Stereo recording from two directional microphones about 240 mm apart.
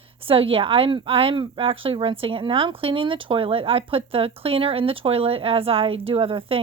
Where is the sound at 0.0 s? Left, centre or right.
Right.